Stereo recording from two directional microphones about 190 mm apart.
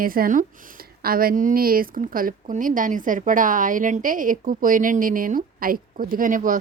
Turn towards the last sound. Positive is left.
turn(degrees=-45)  # may be behind; listen again after turning